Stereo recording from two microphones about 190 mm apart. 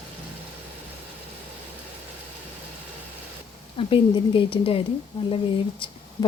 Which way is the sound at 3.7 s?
25° left (ahead or behind).